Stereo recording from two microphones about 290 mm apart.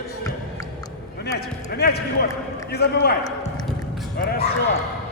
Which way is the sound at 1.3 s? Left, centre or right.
Left.